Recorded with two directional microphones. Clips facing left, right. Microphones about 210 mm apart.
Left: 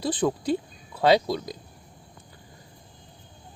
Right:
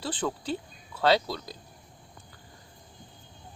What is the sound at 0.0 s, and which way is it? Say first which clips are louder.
Speech: left 7 dB; 15° left (ahead or behind).